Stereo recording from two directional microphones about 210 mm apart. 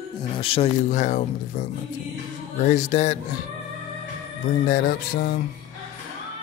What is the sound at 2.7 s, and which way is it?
Music, 35° left (ahead or behind).